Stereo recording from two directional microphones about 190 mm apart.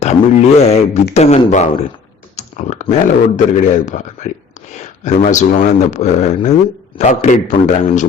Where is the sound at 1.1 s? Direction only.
35° left (ahead or behind).